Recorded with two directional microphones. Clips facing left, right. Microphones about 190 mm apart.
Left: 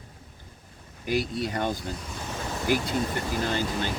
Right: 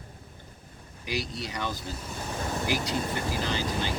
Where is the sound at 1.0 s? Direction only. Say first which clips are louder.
Left 6 dB; 50° left (ahead or behind).